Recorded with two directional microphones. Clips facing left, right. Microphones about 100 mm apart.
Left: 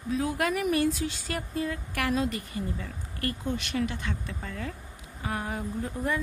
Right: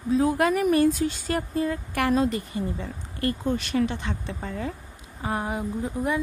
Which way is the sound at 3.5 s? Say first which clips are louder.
Right 5 dB; 40° right (ahead or behind).